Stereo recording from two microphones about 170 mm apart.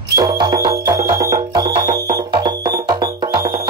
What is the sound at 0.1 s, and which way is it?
Music, 25° right (ahead or behind).